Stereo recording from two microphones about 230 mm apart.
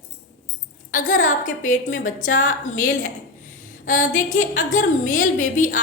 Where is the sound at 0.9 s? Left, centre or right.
Left.